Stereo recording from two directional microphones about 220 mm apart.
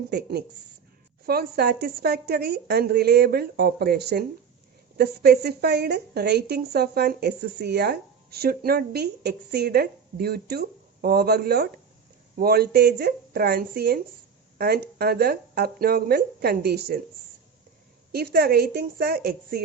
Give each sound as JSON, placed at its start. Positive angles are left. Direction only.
{"t": 0.1, "sound": "a woman's voice", "side_deg": -50}
{"t": 18.1, "sound": "a woman's voice", "side_deg": -45}